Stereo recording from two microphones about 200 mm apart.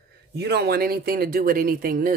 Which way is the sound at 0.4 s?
55° right (ahead or behind).